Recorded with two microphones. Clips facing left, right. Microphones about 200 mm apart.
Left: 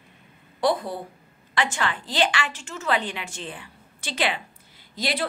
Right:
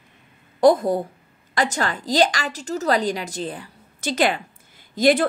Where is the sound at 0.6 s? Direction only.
45° right (ahead or behind).